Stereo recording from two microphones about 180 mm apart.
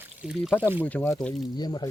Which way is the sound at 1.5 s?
25° left (ahead or behind).